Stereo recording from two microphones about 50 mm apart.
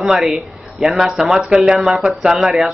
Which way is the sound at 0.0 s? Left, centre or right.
Centre.